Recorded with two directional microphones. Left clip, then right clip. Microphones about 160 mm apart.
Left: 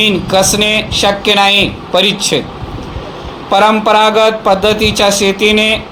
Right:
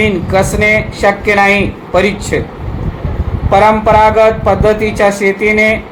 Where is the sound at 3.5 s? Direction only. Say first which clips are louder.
Right 1 dB; 50° left (ahead or behind).